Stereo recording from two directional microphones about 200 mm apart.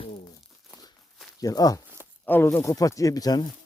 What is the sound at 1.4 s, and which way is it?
Speech, 20° left (ahead or behind).